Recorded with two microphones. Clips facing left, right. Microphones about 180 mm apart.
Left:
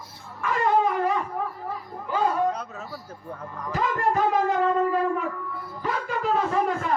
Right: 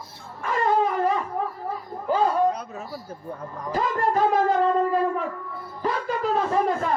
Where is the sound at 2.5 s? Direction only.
15° right (ahead or behind).